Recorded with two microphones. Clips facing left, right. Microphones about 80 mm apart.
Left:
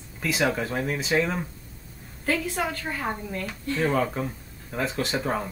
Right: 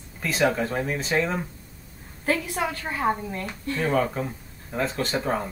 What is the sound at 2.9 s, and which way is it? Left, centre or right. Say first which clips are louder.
Speech: right 5 dB; right.